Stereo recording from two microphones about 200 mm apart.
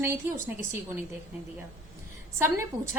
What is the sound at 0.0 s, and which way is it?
Speech, 15° right (ahead or behind).